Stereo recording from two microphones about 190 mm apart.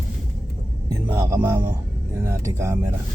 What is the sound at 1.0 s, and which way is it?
Speech, 15° right (ahead or behind).